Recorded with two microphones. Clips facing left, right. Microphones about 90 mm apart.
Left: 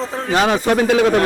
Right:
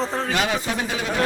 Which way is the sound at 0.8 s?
70° left (ahead or behind).